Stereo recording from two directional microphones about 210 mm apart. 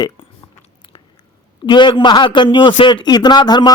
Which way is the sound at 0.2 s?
25° left (ahead or behind).